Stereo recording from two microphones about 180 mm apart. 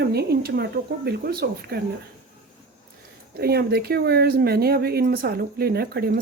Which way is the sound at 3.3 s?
60° right (ahead or behind).